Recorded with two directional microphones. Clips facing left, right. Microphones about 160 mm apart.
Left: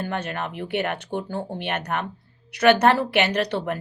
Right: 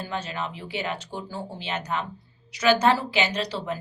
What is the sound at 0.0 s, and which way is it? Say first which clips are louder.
A woman's voice: left 3 dB; 60° left (ahead or behind).